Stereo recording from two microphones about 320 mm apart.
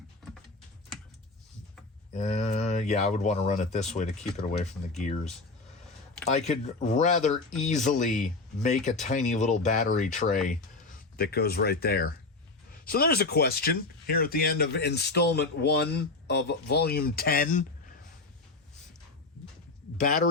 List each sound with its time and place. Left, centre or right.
2.1 s speech: left
6.3 s speech: left
20.0 s speech: left